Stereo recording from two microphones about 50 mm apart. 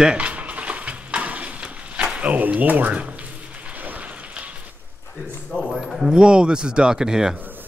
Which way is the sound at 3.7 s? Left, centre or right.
Right.